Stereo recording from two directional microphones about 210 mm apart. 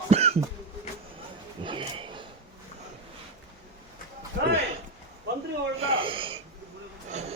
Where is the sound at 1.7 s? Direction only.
25° right (ahead or behind).